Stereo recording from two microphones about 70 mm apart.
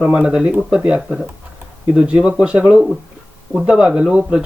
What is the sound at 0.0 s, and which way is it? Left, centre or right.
Speech, centre.